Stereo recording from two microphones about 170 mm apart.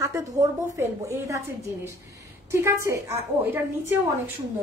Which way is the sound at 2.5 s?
15° right (ahead or behind).